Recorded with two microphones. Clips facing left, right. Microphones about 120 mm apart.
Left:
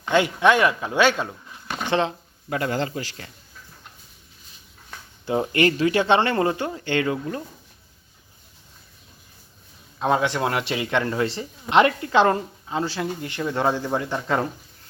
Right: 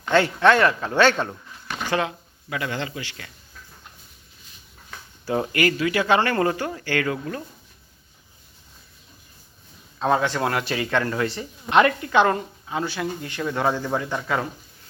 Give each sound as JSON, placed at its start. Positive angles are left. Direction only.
{"t": 0.0, "sound": "speech", "side_deg": 15}
{"t": 1.8, "sound": "speech", "side_deg": 25}
{"t": 2.5, "sound": "a man's voice", "side_deg": 40}
{"t": 5.2, "sound": "speech", "side_deg": 20}
{"t": 10.0, "sound": "speech", "side_deg": 20}